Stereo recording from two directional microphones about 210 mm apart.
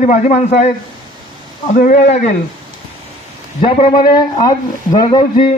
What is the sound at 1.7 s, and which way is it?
Speech, 40° left (ahead or behind).